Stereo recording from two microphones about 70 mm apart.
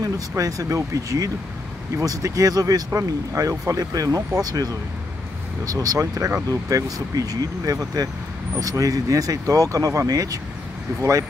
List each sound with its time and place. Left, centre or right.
0.4 s speech: right
2.9 s speech: right